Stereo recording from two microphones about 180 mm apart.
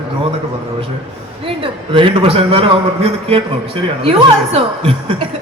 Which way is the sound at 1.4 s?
30° right (ahead or behind).